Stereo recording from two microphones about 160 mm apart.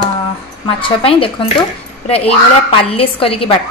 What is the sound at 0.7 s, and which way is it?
Speech, 30° left (ahead or behind).